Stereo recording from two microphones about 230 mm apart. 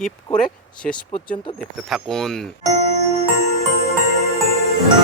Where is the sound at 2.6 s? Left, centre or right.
Right.